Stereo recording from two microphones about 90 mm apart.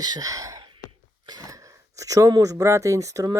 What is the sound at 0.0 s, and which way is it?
Speech, 45° right (ahead or behind).